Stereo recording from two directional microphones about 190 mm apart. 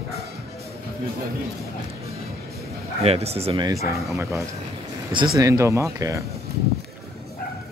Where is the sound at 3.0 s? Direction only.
35° right (ahead or behind); by 4.0 s 15° right (ahead or behind).